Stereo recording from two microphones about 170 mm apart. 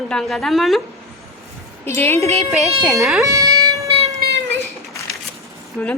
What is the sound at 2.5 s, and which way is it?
Speech, centre (ahead or behind).